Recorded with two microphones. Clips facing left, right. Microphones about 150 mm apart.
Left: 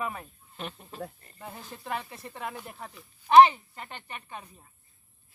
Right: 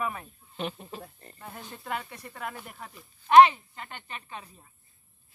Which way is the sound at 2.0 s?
30° left (ahead or behind).